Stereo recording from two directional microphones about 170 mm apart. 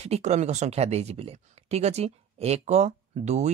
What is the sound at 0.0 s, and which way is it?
Speech, 40° right (ahead or behind).